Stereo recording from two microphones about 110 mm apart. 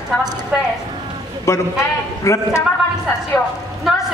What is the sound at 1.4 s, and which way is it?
A man's voice, 25° left (ahead or behind).